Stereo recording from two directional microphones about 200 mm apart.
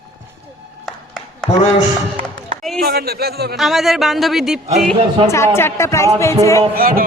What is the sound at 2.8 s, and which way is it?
Speech, 50° right (ahead or behind).